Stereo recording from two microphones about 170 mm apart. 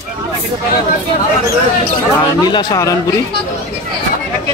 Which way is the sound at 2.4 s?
20° left (ahead or behind).